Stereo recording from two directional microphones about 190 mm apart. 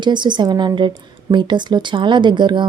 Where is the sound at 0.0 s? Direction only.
25° right (ahead or behind).